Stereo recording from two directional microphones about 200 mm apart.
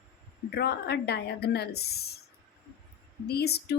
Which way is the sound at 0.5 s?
55° left (ahead or behind).